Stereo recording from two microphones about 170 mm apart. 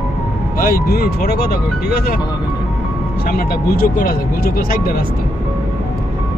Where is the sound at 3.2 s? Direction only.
65° left (ahead or behind).